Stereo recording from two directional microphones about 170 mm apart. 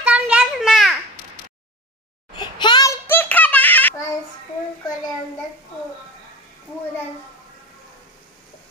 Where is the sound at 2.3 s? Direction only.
25° left (ahead or behind); by 3.9 s 10° left (ahead or behind).